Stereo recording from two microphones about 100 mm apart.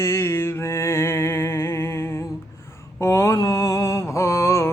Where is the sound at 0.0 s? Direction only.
25° left (ahead or behind).